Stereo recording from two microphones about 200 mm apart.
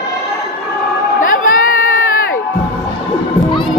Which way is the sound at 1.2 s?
45° left (ahead or behind).